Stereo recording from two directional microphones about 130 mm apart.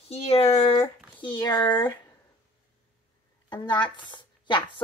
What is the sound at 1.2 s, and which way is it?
Speech, 35° left (ahead or behind).